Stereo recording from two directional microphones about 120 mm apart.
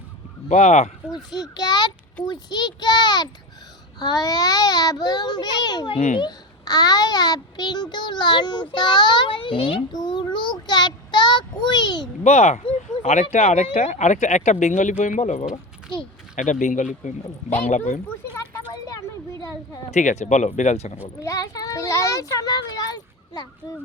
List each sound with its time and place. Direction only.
0.4 s speech: 75° left (ahead or behind)
1.1 s a child's voice: 35° left (ahead or behind)
10.7 s a sound: 35° left (ahead or behind)
12.2 s speech: 70° left (ahead or behind)
13.0 s speech: 80° left
16.3 s speech: 90° left
18.3 s a sound: 30° left (ahead or behind)
19.9 s speech: 80° left; by 21.0 s 65° left (ahead or behind)
21.0 s a child's voice: 25° left (ahead or behind)